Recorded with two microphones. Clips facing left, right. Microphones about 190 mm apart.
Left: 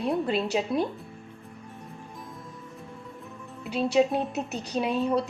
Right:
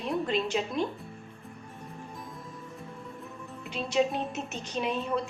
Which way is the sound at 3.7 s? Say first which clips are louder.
Left 5 dB; 35° left (ahead or behind).